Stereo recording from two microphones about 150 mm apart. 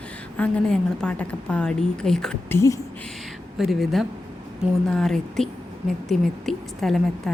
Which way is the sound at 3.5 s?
Centre (ahead or behind).